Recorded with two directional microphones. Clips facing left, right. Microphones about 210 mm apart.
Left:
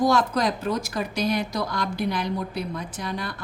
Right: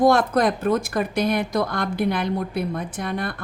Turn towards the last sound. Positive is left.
turn(degrees=-55)  # may be behind; listen again after turning